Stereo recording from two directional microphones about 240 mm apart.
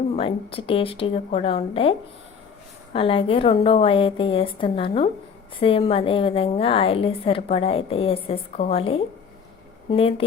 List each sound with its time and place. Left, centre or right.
0.2 s a woman's voice: left